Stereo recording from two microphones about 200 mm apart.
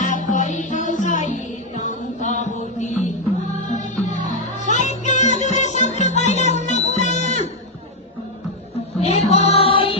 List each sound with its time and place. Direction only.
0.0 s music: 40° left (ahead or behind)
9.0 s music: 30° left (ahead or behind)